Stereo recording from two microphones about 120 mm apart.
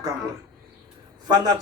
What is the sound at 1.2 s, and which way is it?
Speech, 35° right (ahead or behind).